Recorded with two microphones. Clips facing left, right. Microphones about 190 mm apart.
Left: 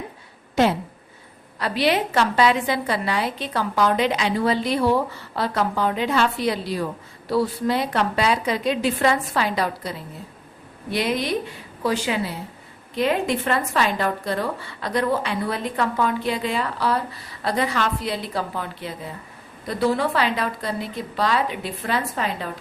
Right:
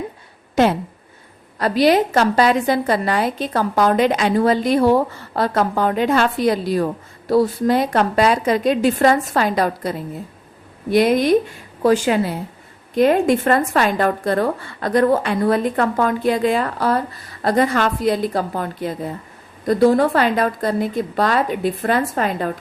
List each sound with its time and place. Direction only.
0.6 s a woman's voice: 50° right (ahead or behind)